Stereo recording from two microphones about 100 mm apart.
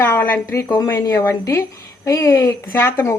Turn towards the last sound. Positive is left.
turn(degrees=25)  # may be behind; listen again after turning